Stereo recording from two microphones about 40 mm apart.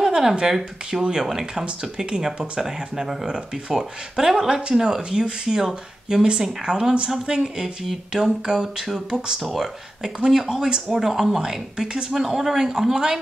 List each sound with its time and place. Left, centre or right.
0.0 s a woman's voice: centre